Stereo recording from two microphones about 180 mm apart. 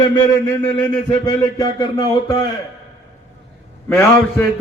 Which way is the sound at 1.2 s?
20° left (ahead or behind).